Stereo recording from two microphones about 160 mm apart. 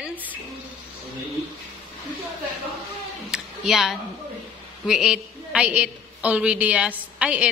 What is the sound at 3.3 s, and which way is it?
Music, centre (ahead or behind).